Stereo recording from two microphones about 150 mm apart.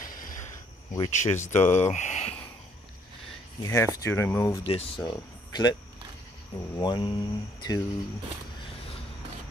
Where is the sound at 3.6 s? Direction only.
20° left (ahead or behind).